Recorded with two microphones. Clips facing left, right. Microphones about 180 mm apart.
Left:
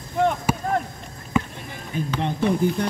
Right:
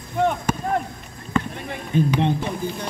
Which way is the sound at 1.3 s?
10° left (ahead or behind).